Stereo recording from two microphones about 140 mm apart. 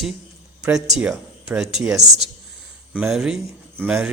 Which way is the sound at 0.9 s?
5° right (ahead or behind).